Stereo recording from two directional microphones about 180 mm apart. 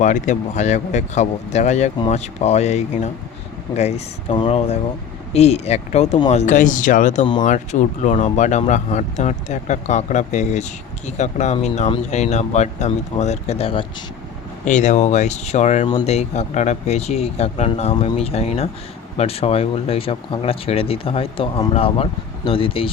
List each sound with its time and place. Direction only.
0.0 s speech: 45° left (ahead or behind)
14.6 s speech: 45° left (ahead or behind)